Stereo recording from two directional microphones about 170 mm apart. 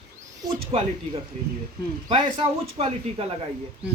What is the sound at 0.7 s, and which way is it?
Speech, 35° right (ahead or behind).